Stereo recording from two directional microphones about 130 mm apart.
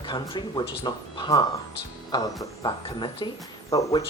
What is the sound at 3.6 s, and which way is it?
Speech, 25° left (ahead or behind).